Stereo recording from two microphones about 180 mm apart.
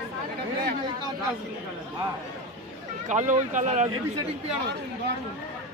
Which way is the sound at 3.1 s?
40° right (ahead or behind).